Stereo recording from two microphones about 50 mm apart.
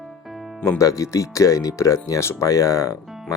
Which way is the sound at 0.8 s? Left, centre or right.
Left.